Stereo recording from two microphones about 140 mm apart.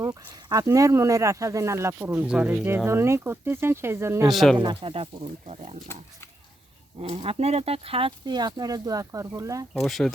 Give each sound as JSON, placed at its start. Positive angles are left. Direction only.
{"t": 0.3, "sound": "speech", "side_deg": -35}
{"t": 0.6, "sound": "speech", "side_deg": -20}
{"t": 4.3, "sound": "speech", "side_deg": 0}
{"t": 4.6, "sound": "speech", "side_deg": -40}
{"t": 7.0, "sound": "speech", "side_deg": -45}
{"t": 9.8, "sound": "speech", "side_deg": 0}